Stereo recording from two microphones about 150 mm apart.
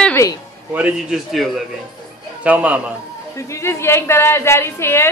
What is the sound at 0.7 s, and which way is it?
A man's voice, 5° right (ahead or behind).